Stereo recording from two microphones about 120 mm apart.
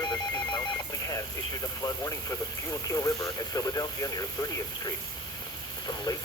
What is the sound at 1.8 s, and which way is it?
Speech, 30° left (ahead or behind).